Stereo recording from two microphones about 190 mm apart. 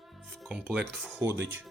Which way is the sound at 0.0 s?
Centre (ahead or behind).